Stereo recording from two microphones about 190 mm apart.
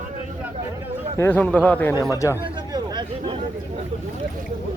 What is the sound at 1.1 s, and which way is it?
A man's voice, 10° left (ahead or behind).